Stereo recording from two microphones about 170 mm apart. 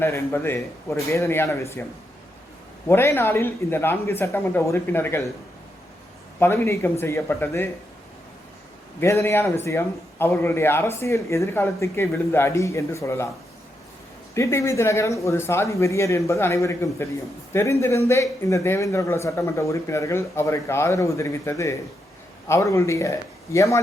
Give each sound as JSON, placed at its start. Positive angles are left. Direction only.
{"t": 0.0, "sound": "speech", "side_deg": 15}
{"t": 2.8, "sound": "speech", "side_deg": 15}
{"t": 6.4, "sound": "speech", "side_deg": 15}
{"t": 9.0, "sound": "speech", "side_deg": 15}
{"t": 14.3, "sound": "speech", "side_deg": 15}